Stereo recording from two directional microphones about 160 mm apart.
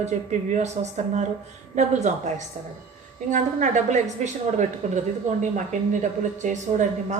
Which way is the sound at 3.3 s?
50° right (ahead or behind).